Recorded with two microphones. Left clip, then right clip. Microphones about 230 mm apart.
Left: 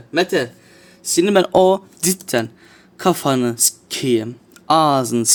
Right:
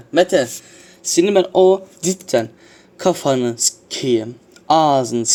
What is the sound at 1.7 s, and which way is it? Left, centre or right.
Speech, left.